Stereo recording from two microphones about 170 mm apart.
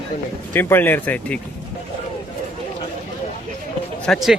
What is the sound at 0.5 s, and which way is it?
Speech, 10° left (ahead or behind).